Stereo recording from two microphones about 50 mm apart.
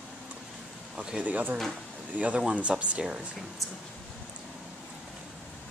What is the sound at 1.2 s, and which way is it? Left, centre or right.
Speech, right.